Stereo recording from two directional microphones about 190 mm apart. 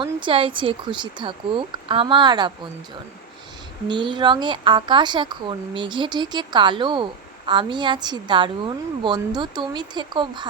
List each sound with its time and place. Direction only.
0.0 s speech: 25° right (ahead or behind)
3.8 s speech: 25° right (ahead or behind)